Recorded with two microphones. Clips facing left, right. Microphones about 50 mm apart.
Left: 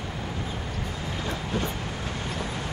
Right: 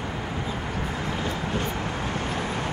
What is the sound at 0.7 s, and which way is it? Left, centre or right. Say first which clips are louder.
Vehicle: right 4 dB; right.